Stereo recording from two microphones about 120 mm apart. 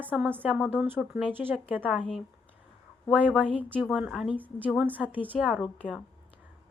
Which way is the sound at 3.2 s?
10° right (ahead or behind).